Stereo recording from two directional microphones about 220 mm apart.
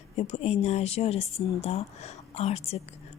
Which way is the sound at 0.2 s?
30° left (ahead or behind).